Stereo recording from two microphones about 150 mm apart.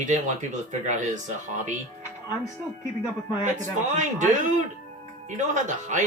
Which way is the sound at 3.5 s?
55° right (ahead or behind).